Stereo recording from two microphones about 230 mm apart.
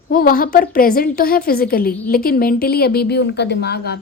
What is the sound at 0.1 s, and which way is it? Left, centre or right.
A woman's voice, left.